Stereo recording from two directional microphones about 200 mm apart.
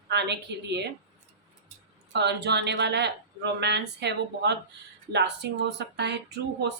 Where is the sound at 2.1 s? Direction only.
60° right (ahead or behind).